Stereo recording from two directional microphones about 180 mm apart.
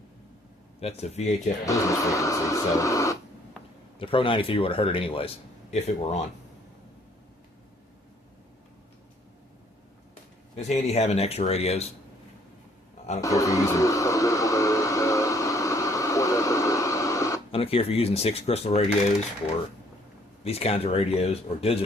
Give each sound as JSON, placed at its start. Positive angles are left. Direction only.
{"t": 0.8, "sound": "speech", "side_deg": 35}
{"t": 1.6, "sound": "speech", "side_deg": 15}
{"t": 3.9, "sound": "speech", "side_deg": 30}
{"t": 10.5, "sound": "speech", "side_deg": 35}
{"t": 13.2, "sound": "a sound", "side_deg": 20}
{"t": 17.5, "sound": "speech", "side_deg": 30}
{"t": 20.4, "sound": "speech", "side_deg": 35}